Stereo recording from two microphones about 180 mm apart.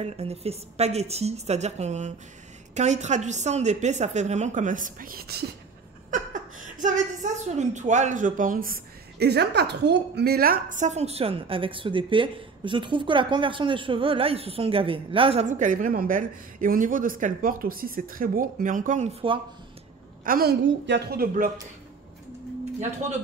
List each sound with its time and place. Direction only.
0.0 s a woman's voice: 35° right (ahead or behind); by 5.4 s 60° right (ahead or behind)
6.0 s a woman's voice: 45° right (ahead or behind)
9.2 s a woman's voice: 65° right (ahead or behind); by 15.4 s 30° right (ahead or behind)
15.4 s speech: 45° right (ahead or behind)
20.2 s speech: 55° right (ahead or behind)
20.8 s speech: 70° right (ahead or behind)